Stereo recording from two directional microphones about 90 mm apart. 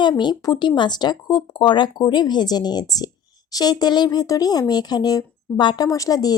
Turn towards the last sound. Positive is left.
turn(degrees=45)  # may be behind; listen again after turning